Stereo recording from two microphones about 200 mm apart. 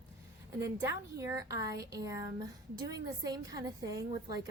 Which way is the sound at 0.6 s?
15° right (ahead or behind).